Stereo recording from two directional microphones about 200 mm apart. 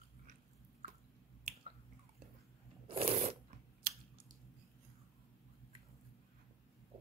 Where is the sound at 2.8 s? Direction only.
30° right (ahead or behind).